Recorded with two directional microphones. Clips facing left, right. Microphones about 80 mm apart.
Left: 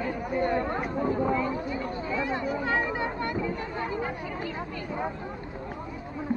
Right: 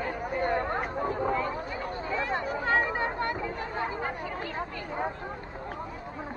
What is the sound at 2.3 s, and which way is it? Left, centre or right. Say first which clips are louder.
Speech: right 2 dB; right.